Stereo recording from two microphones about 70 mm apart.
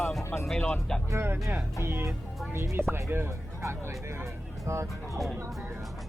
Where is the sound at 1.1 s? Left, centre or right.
Right.